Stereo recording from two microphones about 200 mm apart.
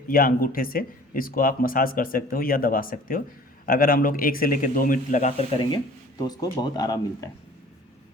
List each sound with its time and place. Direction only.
0.1 s speech: 45° left (ahead or behind); by 7.3 s 20° left (ahead or behind)